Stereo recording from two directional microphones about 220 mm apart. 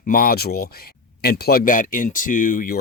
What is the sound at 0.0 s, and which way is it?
Speech, 40° left (ahead or behind).